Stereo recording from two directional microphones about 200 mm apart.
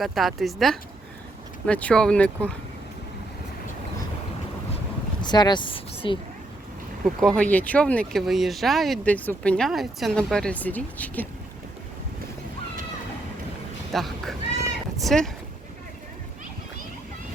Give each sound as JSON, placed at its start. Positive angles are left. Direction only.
{"t": 0.0, "sound": "speech", "side_deg": 0}
{"t": 5.2, "sound": "speech", "side_deg": 20}
{"t": 7.0, "sound": "speech", "side_deg": 0}
{"t": 13.9, "sound": "a sound", "side_deg": 0}
{"t": 15.0, "sound": "speech", "side_deg": 0}